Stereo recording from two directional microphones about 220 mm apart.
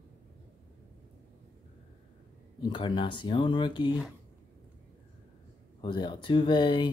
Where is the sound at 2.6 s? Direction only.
20° left (ahead or behind).